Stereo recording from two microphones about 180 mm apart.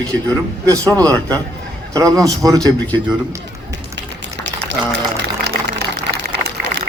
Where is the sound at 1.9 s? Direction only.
20° right (ahead or behind).